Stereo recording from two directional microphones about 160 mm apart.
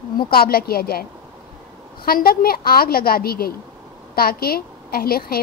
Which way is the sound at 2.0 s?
70° left (ahead or behind).